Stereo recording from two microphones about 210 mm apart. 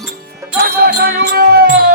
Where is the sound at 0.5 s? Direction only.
45° right (ahead or behind).